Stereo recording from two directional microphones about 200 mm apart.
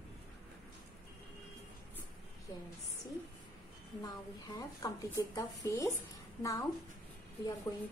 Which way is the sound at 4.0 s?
20° left (ahead or behind).